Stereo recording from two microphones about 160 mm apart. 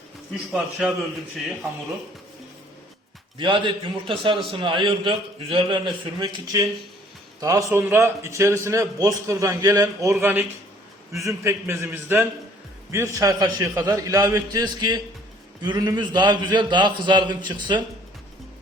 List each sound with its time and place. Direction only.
0.5 s a man's voice: centre (ahead or behind)
3.3 s a man's voice: 30° right (ahead or behind)